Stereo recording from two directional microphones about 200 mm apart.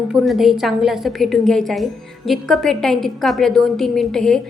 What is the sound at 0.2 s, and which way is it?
A woman's voice, centre (ahead or behind).